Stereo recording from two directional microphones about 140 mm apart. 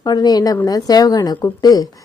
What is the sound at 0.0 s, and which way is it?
A woman's voice, 30° left (ahead or behind).